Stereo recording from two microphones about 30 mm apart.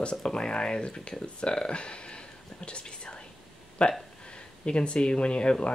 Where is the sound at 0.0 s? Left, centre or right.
Left.